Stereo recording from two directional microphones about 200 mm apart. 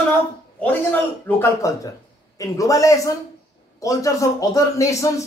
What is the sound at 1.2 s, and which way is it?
A man's voice, 15° left (ahead or behind).